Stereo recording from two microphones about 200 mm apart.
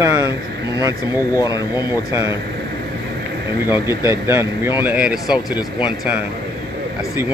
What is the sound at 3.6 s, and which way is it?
Speech, 10° right (ahead or behind).